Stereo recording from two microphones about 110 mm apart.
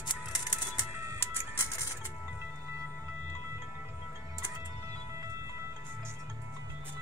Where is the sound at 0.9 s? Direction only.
25° right (ahead or behind).